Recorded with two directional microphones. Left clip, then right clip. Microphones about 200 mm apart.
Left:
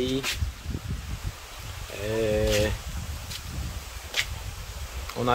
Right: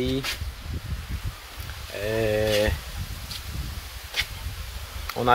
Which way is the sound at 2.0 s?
5° left (ahead or behind).